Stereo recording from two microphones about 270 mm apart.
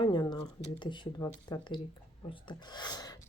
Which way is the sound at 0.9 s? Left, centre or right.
Centre.